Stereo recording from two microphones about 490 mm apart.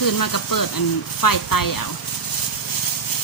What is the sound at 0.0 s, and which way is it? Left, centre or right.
Speech, left.